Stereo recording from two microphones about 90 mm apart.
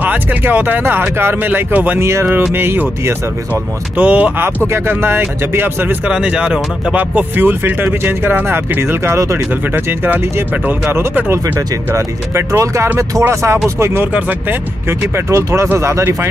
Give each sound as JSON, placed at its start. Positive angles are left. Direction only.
{"t": 0.0, "sound": "speech", "side_deg": -20}
{"t": 4.7, "sound": "speech", "side_deg": -25}
{"t": 6.0, "sound": "speech", "side_deg": -10}
{"t": 9.8, "sound": "speech", "side_deg": -25}